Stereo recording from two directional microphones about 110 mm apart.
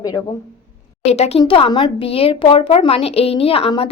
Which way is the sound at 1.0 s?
75° left (ahead or behind).